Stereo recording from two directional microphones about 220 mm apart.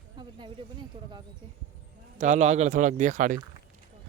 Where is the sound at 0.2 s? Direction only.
20° right (ahead or behind).